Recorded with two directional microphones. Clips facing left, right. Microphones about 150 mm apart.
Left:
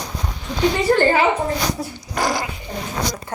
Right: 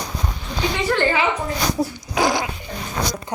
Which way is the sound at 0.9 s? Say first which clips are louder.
Left 1 dB; 40° left (ahead or behind).